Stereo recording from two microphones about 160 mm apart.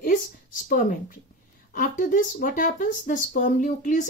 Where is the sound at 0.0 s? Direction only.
55° left (ahead or behind).